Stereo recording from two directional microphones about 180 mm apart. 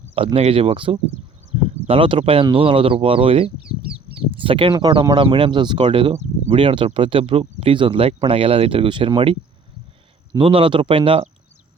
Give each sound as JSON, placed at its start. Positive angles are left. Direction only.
{"t": 0.3, "sound": "speech", "side_deg": -35}
{"t": 1.5, "sound": "a sound", "side_deg": -35}
{"t": 1.9, "sound": "speech", "side_deg": -30}